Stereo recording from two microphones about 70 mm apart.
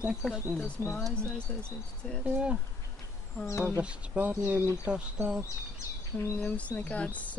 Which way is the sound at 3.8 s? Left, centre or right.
Centre.